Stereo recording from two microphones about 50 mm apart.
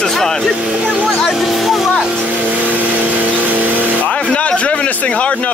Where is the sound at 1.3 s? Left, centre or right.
Centre.